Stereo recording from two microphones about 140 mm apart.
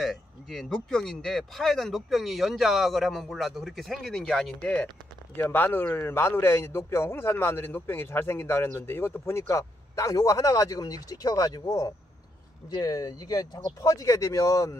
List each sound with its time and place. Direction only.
0.0 s a man's voice: centre (ahead or behind); by 14.8 s 25° left (ahead or behind)